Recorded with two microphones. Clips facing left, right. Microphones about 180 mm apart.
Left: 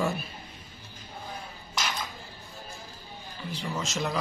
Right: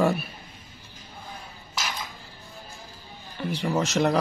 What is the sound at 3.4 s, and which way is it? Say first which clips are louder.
Speech: right 8 dB; 70° right (ahead or behind).